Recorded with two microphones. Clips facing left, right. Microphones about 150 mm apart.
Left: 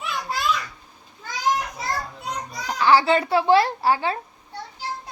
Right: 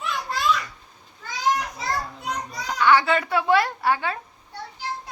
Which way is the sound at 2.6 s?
30° left (ahead or behind).